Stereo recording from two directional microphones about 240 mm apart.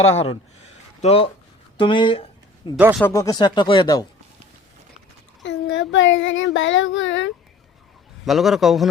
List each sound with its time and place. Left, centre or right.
0.1 s speech: left
5.4 s child singing: left
8.2 s a man's voice: centre